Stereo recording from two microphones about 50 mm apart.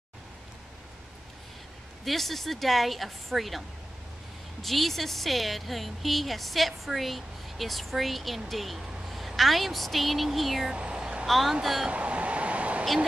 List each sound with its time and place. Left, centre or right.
2.0 s a woman's voice: centre
10.7 s vehicle: centre
11.2 s a woman's voice: centre
11.9 s vehicle: right